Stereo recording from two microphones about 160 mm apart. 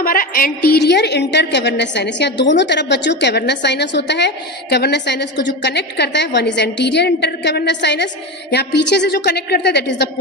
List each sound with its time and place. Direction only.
0.0 s a woman's voice: 65° left (ahead or behind); by 10.1 s 90° left